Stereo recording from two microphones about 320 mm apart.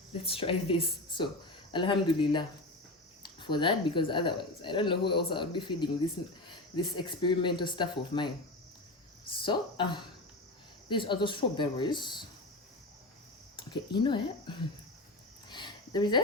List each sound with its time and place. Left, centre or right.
0.1 s speech: centre
9.4 s speech: centre
13.6 s speech: centre
15.4 s cricket: centre